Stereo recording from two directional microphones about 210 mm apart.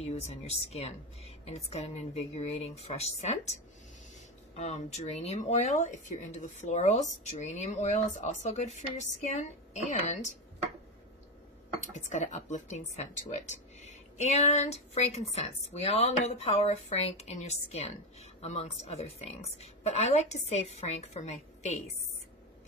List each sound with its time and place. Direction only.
0.0 s speech: 30° left (ahead or behind)
4.6 s a woman's voice: 30° left (ahead or behind)
11.9 s speech: 35° left (ahead or behind)